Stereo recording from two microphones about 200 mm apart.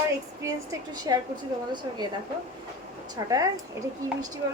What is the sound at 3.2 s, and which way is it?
A woman's voice, 15° right (ahead or behind).